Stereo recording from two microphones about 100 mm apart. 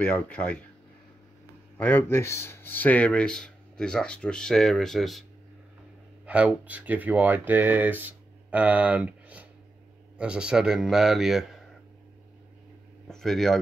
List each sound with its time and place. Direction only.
0.0 s speech: 15° left (ahead or behind)
1.8 s speech: 20° left (ahead or behind); by 5.2 s centre (ahead or behind)
6.2 s a man's voice: 15° right (ahead or behind)
13.1 s speech: 5° left (ahead or behind)